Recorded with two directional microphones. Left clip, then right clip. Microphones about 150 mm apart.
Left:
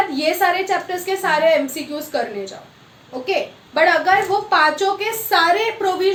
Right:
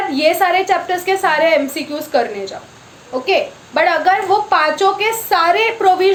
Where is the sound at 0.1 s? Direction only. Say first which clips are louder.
Right 4 dB; 20° right (ahead or behind).